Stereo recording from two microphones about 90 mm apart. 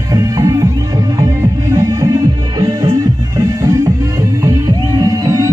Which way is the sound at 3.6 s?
35° right (ahead or behind).